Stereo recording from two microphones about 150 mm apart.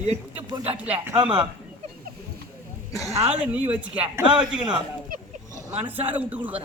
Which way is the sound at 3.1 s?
45° right (ahead or behind).